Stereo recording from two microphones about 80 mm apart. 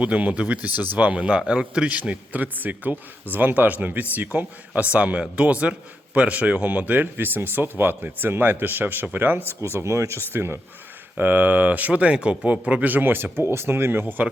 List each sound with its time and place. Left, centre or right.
0.0 s a man's voice: centre